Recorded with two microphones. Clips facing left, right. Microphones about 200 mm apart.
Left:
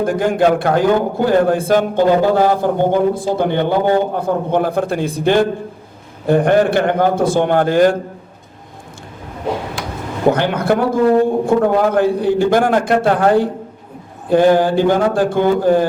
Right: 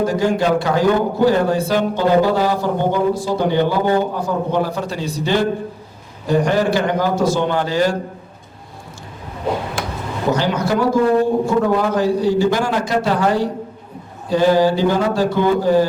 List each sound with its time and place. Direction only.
0.0 s a man's voice: 55° left (ahead or behind)
9.8 s a sound: 50° right (ahead or behind)
10.3 s a man's voice: 55° left (ahead or behind)